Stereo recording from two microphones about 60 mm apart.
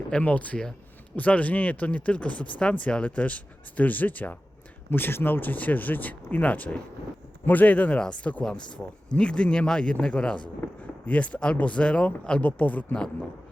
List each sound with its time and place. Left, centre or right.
0.1 s a man's voice: left